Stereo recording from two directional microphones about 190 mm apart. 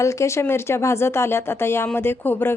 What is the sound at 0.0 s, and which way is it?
Speech, 15° left (ahead or behind).